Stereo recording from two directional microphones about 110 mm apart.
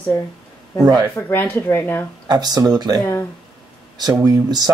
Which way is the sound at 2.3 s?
40° right (ahead or behind).